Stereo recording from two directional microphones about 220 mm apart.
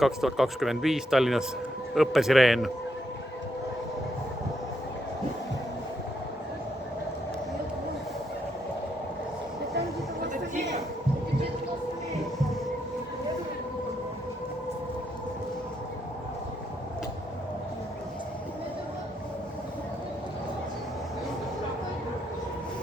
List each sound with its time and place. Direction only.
0.0 s speech: centre (ahead or behind)